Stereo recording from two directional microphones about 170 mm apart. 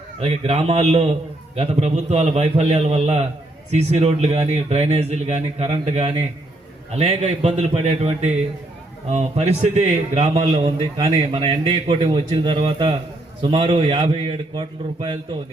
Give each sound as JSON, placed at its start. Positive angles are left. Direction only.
{"t": 0.2, "sound": "a man's voice", "side_deg": -40}